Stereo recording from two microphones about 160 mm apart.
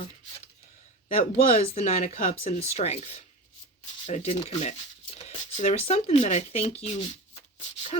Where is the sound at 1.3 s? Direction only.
40° left (ahead or behind).